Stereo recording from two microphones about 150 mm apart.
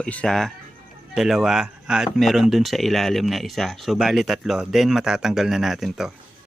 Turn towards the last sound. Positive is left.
turn(degrees=0)  # may be behind; listen again after turning